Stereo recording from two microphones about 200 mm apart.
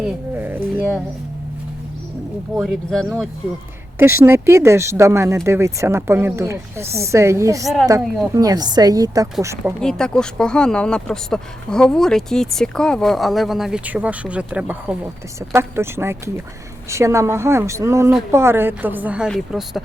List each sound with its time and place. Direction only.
0.0 s a sound: 10° right (ahead or behind)
2.6 s speech: centre (ahead or behind)
3.9 s speech: 10° right (ahead or behind)
9.8 s speech: 5° left (ahead or behind)